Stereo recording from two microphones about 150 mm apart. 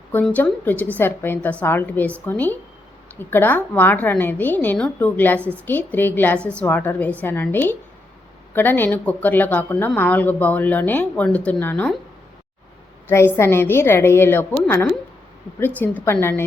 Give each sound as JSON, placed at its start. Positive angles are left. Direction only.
{"t": 0.1, "sound": "a woman's voice", "side_deg": 10}
{"t": 5.4, "sound": "a woman's voice", "side_deg": -15}
{"t": 5.6, "sound": "a woman's voice", "side_deg": 15}
{"t": 13.1, "sound": "a woman's voice", "side_deg": 15}
{"t": 15.6, "sound": "a woman's voice", "side_deg": 10}